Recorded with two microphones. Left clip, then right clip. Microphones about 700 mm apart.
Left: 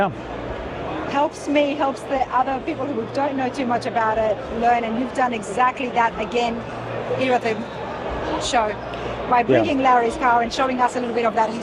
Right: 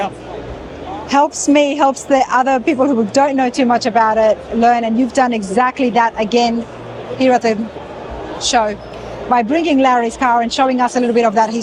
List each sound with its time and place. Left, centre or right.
1.1 s a woman's voice: right